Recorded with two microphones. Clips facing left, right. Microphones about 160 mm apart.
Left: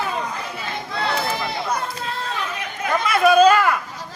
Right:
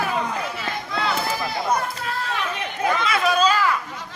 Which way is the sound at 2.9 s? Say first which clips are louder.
Left 8 dB; 55° left (ahead or behind).